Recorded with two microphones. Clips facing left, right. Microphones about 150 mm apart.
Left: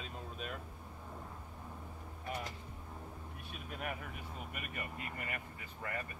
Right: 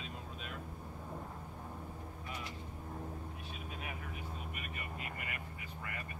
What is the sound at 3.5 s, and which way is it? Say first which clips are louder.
Vehicle: left 6 dB; 55° left (ahead or behind).